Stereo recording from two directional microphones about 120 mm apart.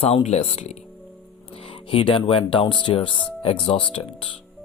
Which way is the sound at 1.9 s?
45° left (ahead or behind).